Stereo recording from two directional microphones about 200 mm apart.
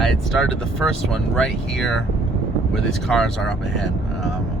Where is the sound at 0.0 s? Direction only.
Centre (ahead or behind).